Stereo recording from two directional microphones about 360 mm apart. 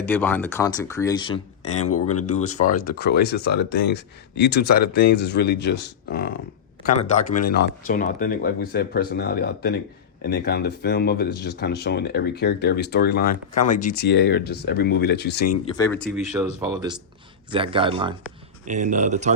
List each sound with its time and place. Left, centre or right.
0.0 s speech: centre
1.8 s speech: left
2.2 s speech: centre
15.6 s speech: centre